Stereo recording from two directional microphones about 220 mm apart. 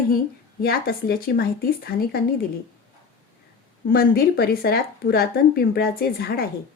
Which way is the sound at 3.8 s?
40° left (ahead or behind).